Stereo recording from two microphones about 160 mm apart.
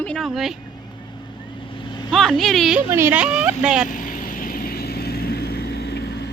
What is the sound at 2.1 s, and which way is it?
Speech, centre (ahead or behind).